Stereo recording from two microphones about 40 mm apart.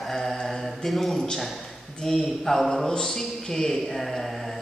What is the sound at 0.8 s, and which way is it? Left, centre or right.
A man's voice, centre.